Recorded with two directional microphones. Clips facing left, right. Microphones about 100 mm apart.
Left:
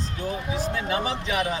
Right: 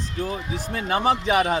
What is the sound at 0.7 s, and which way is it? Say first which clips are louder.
Speech: right 9 dB; 50° right (ahead or behind).